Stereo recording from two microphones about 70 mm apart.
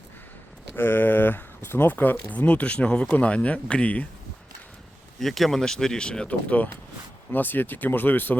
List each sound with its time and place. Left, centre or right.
0.8 s speech: left
5.2 s speech: centre; by 8.4 s left